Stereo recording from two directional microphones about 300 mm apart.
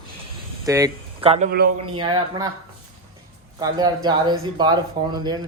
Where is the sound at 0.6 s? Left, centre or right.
Centre; by 1.7 s right.